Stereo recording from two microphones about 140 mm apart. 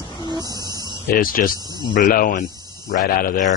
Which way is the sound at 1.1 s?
90° left.